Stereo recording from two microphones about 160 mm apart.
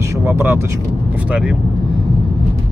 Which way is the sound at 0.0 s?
15° right (ahead or behind).